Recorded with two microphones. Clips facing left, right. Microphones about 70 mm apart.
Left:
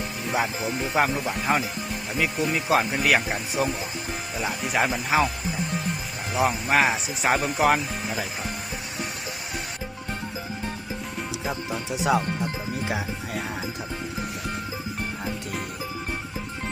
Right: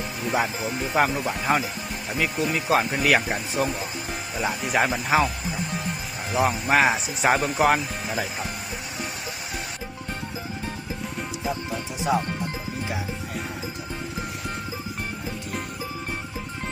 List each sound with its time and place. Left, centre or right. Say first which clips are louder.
0.3 s speech: right 1 dB; centre
6.3 s speech: right 1 dB; centre
12.1 s speech: left 1 dB; left